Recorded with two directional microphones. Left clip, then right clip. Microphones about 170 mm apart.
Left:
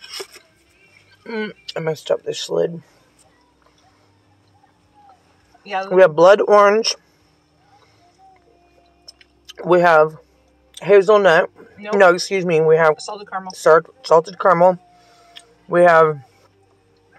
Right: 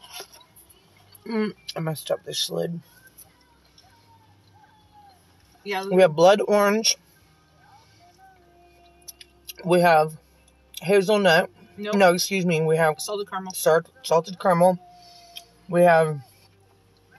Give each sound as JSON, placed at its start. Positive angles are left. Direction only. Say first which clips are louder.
{"t": 1.2, "sound": "speech", "louder": "left 2 dB", "side_deg": -10}
{"t": 1.7, "sound": "speech", "louder": "left 7 dB", "side_deg": 0}
{"t": 5.7, "sound": "speech", "louder": "left 6 dB", "side_deg": 15}
{"t": 9.5, "sound": "speech", "louder": "left 5 dB", "side_deg": 15}
{"t": 15.3, "sound": "a sound", "louder": "left 6 dB", "side_deg": 20}